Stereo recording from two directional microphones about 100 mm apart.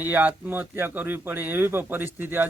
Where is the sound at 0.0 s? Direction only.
15° right (ahead or behind).